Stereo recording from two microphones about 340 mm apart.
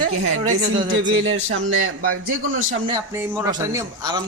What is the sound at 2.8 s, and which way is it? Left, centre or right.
Speech, centre.